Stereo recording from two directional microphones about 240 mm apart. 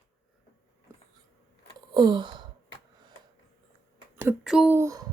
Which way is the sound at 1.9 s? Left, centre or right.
Centre.